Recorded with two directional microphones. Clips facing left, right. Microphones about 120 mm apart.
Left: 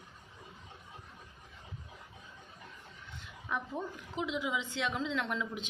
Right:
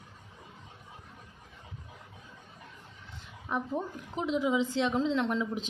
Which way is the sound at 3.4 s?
35° right (ahead or behind).